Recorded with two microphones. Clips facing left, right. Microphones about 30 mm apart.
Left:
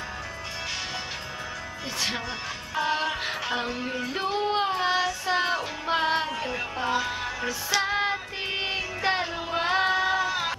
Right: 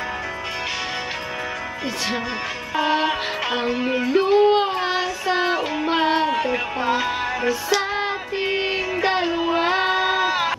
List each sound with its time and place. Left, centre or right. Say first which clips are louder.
3.0 s music: right 6 dB; right
3.5 s music: right 8 dB; centre
4.3 s music: right 8 dB; centre
7.7 s music: right 3 dB; centre
9.5 s child singing: right 2 dB; centre